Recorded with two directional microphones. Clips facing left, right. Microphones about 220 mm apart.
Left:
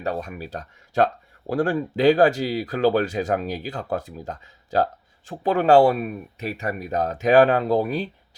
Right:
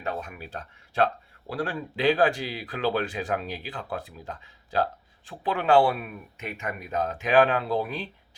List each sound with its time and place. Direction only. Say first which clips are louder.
0.0 s speech: left 5 dB; 35° left (ahead or behind)